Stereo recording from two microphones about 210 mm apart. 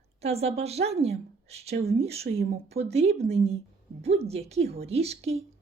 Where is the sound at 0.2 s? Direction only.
30° right (ahead or behind).